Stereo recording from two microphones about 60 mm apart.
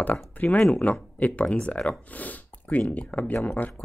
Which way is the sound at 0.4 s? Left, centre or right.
Left.